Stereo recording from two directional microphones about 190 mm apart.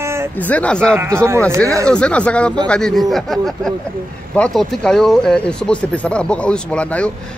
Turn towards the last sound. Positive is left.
turn(degrees=5)  # may be behind; listen again after turning